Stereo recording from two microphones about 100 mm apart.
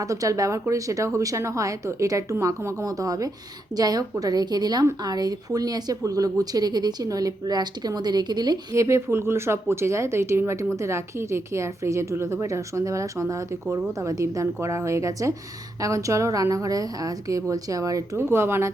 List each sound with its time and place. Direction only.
0.0 s speech: 35° right (ahead or behind)
8.7 s a woman's voice: 30° right (ahead or behind)